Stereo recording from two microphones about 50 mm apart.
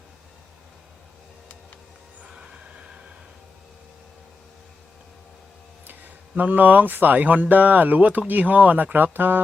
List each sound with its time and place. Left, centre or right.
2.3 s train: right
5.8 s speech: right